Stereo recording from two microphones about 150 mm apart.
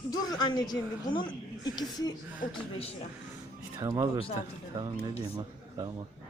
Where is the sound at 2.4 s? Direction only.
65° left (ahead or behind).